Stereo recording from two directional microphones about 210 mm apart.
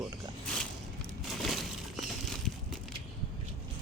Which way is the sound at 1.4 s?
Centre (ahead or behind).